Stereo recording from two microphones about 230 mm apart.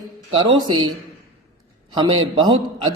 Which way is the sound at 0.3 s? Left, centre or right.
Right.